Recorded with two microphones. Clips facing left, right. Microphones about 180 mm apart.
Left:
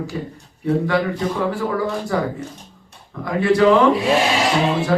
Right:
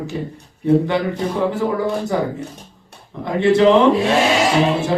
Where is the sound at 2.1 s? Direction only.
20° right (ahead or behind).